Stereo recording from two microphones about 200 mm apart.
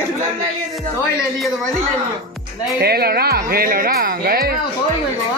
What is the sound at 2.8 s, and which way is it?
Speech, 50° right (ahead or behind).